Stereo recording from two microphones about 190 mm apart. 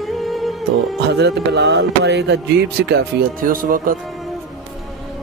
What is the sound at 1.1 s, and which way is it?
Speech, 60° right (ahead or behind).